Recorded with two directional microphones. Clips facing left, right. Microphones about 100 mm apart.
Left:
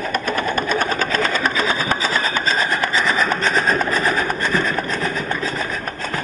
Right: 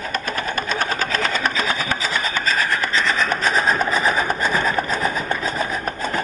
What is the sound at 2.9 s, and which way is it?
Rub, 5° left (ahead or behind).